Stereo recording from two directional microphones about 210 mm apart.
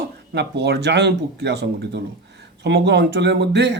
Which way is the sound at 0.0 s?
55° right (ahead or behind).